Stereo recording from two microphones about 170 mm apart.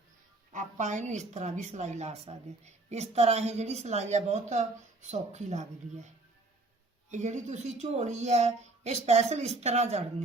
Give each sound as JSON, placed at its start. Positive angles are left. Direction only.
{"t": 0.5, "sound": "a woman's voice", "side_deg": -45}
{"t": 7.1, "sound": "speech", "side_deg": -45}